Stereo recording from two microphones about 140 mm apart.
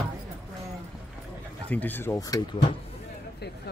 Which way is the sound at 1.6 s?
10° left (ahead or behind).